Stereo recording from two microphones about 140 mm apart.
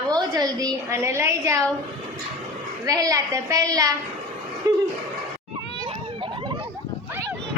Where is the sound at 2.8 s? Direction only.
25° right (ahead or behind).